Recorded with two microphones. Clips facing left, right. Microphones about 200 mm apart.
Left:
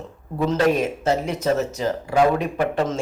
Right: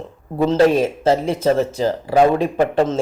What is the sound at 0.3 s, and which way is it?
Speech, 30° right (ahead or behind).